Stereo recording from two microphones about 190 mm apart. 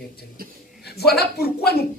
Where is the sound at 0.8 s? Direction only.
55° left (ahead or behind).